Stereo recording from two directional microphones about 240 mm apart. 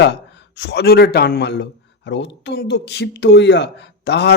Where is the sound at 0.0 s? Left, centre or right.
Left.